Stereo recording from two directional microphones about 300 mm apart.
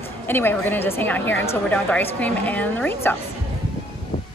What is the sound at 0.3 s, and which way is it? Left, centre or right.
A woman's voice, centre.